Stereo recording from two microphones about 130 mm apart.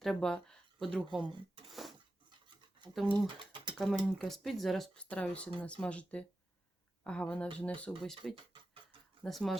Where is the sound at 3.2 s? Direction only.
40° right (ahead or behind).